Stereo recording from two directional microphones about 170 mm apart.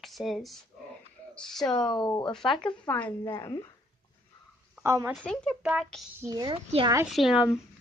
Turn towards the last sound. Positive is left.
turn(degrees=-5)  # may be behind; listen again after turning